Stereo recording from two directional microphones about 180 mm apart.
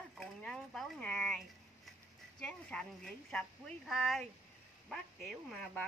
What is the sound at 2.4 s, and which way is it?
Speech, 5° left (ahead or behind).